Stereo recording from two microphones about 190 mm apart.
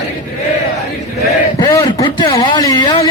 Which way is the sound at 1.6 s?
20° left (ahead or behind).